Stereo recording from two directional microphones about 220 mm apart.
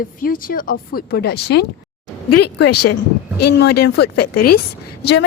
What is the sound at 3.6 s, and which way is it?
Speech, 50° left (ahead or behind).